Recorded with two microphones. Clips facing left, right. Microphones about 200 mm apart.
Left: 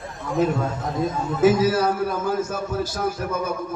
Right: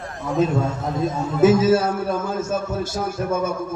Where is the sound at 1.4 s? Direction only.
25° right (ahead or behind).